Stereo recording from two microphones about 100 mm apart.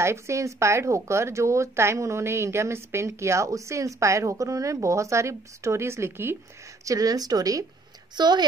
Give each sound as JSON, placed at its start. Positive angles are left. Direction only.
{"t": 0.0, "sound": "speech", "side_deg": -30}
{"t": 6.8, "sound": "speech", "side_deg": -35}